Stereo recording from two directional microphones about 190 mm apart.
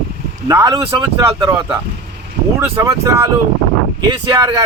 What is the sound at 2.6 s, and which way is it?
Speech, 15° right (ahead or behind).